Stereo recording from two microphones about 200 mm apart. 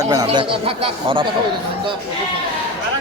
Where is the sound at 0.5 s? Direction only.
30° right (ahead or behind).